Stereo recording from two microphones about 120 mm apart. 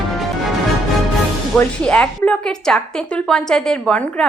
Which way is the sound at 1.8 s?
10° left (ahead or behind).